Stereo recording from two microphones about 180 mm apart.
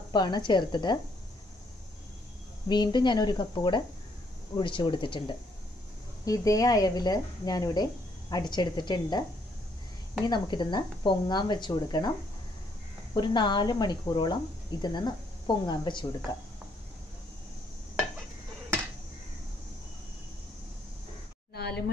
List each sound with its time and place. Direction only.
0.1 s speech: 25° left (ahead or behind)
2.7 s speech: 25° left (ahead or behind)
10.2 s speech: 25° left (ahead or behind)
13.1 s speech: 25° left (ahead or behind)
21.5 s a sound: 65° left (ahead or behind)